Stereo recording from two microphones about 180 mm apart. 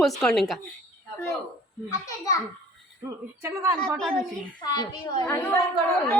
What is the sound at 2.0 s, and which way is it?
Speech, 20° left (ahead or behind).